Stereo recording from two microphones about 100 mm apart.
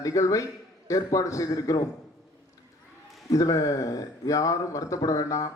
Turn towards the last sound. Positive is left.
turn(degrees=35)  # may be behind; listen again after turning